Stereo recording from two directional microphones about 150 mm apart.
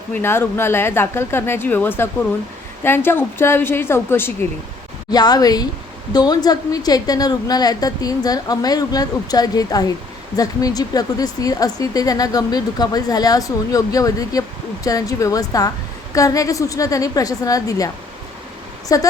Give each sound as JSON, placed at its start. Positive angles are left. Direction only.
{"t": 0.1, "sound": "speech", "side_deg": 15}
{"t": 5.1, "sound": "speech", "side_deg": 25}